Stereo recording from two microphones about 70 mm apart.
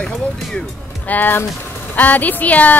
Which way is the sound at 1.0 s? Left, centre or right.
Left.